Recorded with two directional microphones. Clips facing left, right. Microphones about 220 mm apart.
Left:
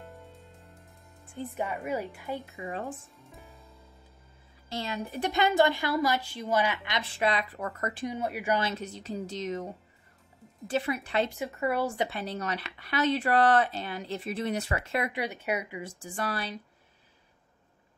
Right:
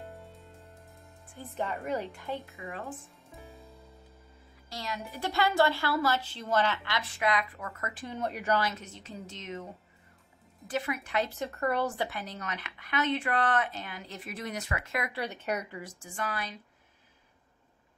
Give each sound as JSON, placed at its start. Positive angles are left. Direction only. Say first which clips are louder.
{"t": 0.3, "sound": "music", "louder": "right 1 dB", "side_deg": 0}
{"t": 1.4, "sound": "a woman's voice", "louder": "left 2 dB", "side_deg": 15}
{"t": 2.5, "sound": "a woman's voice", "louder": "left 5 dB", "side_deg": 30}
{"t": 5.1, "sound": "a woman's voice", "louder": "left 3 dB", "side_deg": 20}
{"t": 7.0, "sound": "a woman's voice", "louder": "left 2 dB", "side_deg": 30}
{"t": 8.0, "sound": "a woman's voice", "louder": "left 1 dB", "side_deg": 10}
{"t": 8.5, "sound": "speech", "louder": "left 1 dB", "side_deg": 30}
{"t": 10.7, "sound": "a woman's voice", "louder": "left 3 dB", "side_deg": 30}
{"t": 11.3, "sound": "a woman's voice", "louder": "left 1 dB", "side_deg": 10}
{"t": 12.1, "sound": "speech", "louder": "left 5 dB", "side_deg": 30}
{"t": 15.1, "sound": "a woman's voice", "louder": "left 2 dB", "side_deg": 10}
{"t": 15.8, "sound": "speech", "louder": "left 3 dB", "side_deg": 35}